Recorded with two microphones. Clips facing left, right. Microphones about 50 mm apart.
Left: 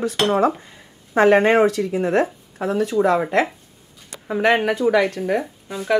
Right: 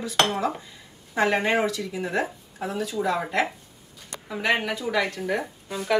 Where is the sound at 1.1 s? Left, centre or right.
Left.